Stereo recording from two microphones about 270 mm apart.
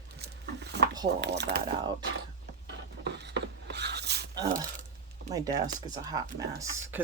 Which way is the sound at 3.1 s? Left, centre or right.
Right.